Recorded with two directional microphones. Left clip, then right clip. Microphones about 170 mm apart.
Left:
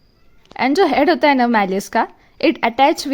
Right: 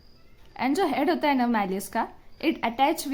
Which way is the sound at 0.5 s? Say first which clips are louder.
Left 10 dB; 45° left (ahead or behind).